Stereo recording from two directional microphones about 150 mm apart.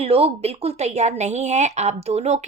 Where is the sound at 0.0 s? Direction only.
40° right (ahead or behind).